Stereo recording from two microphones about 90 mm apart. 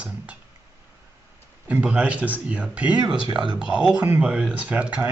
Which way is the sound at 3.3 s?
55° right (ahead or behind).